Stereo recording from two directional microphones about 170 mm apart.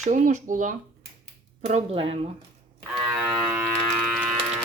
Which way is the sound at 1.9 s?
35° right (ahead or behind).